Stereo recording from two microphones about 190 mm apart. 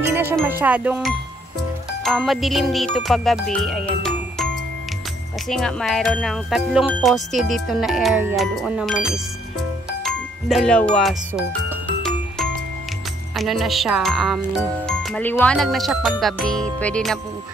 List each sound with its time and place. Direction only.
0.0 s music: 10° right (ahead or behind)
2.0 s speech: centre (ahead or behind)
3.5 s music: 5° left (ahead or behind)
5.5 s speech: 5° left (ahead or behind)
13.4 s speech: centre (ahead or behind)